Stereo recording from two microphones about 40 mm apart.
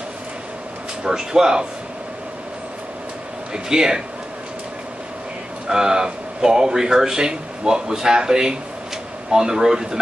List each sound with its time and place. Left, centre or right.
1.0 s speech: centre
3.5 s speech: centre
5.7 s speech: centre